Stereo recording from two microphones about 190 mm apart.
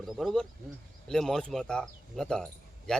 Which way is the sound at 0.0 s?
Centre (ahead or behind).